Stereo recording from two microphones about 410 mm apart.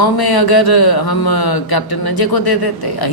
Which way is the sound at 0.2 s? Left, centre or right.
Left.